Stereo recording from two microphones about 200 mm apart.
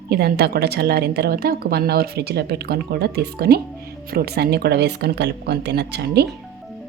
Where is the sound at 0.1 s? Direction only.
55° right (ahead or behind).